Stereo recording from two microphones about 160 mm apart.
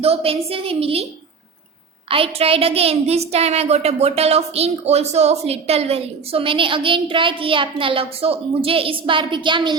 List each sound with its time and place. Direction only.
0.0 s a woman's voice: 35° right (ahead or behind)
2.0 s a woman's voice: 35° right (ahead or behind)